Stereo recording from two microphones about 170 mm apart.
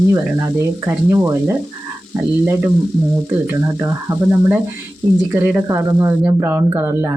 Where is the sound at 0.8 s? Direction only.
15° right (ahead or behind).